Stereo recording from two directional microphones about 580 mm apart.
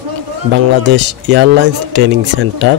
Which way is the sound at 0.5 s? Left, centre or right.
Centre.